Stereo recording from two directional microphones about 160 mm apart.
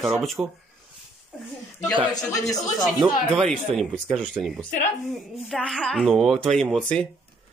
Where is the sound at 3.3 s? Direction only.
Centre (ahead or behind).